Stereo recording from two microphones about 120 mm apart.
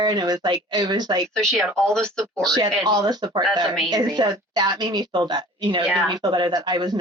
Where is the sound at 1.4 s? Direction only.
5° left (ahead or behind).